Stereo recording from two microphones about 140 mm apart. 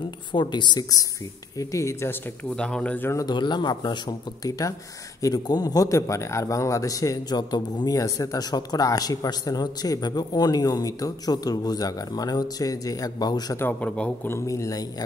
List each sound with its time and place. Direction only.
0.3 s a man's voice: 35° left (ahead or behind)
2.5 s speech: 5° left (ahead or behind)
3.3 s a man's voice: 30° left (ahead or behind)
13.6 s speech: 10° left (ahead or behind)